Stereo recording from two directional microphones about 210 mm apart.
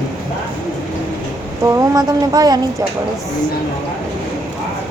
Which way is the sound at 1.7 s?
15° right (ahead or behind).